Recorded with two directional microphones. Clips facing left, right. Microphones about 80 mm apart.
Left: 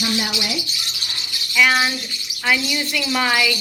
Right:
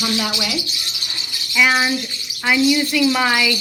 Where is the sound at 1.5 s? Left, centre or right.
Centre.